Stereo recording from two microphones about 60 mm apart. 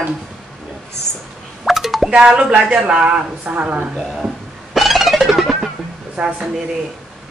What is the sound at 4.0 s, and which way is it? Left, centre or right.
Speech, centre.